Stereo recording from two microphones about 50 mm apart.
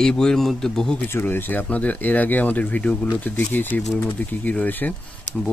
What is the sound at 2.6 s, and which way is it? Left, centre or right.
Speech, left.